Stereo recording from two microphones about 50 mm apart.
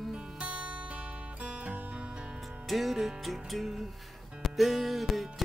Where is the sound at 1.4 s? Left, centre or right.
Right.